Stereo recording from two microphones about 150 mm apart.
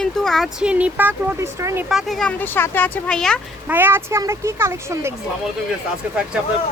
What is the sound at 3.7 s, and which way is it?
Speech, 15° right (ahead or behind).